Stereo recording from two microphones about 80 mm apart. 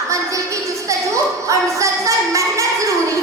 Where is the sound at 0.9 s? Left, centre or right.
Right.